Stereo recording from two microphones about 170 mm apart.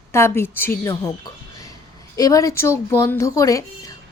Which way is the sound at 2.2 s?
20° left (ahead or behind).